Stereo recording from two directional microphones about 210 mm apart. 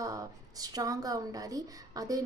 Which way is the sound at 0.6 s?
15° right (ahead or behind).